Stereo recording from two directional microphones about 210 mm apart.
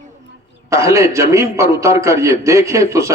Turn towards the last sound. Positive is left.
turn(degrees=-15)  # may be behind; listen again after turning